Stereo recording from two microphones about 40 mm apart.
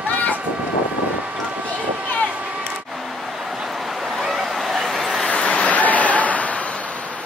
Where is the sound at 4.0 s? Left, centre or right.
Centre.